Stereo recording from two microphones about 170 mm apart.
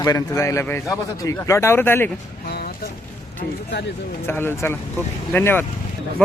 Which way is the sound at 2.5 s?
65° left (ahead or behind).